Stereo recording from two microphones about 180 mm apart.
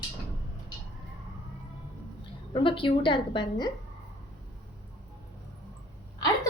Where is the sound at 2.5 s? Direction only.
30° left (ahead or behind).